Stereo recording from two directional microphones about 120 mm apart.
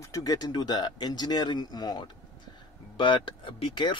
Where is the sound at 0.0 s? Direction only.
30° left (ahead or behind).